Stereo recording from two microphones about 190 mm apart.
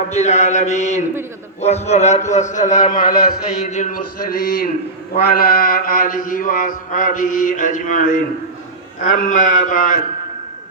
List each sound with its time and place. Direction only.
0.1 s a man's voice: 35° left (ahead or behind)
3.1 s mantra: 50° left (ahead or behind)